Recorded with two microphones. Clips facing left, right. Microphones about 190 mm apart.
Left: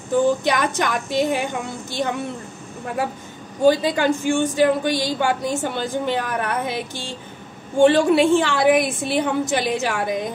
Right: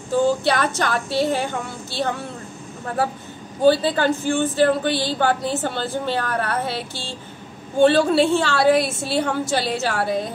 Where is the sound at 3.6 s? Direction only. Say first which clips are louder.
Even; 15° left (ahead or behind).